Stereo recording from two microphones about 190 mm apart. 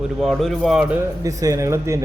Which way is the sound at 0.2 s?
Centre (ahead or behind).